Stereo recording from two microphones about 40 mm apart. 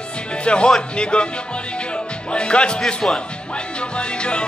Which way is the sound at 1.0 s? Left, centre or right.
Left.